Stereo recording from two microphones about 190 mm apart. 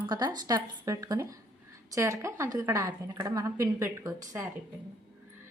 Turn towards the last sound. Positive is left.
turn(degrees=-20)  # may be behind; listen again after turning